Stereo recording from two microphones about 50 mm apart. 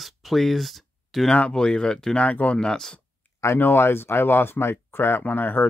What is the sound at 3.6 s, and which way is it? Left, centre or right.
Speech, left.